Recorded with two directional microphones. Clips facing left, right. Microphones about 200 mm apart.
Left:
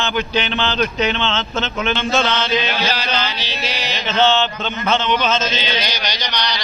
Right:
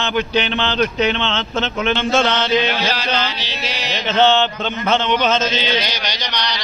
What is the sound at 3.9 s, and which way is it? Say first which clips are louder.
Mantra: right 2 dB; 55° right (ahead or behind).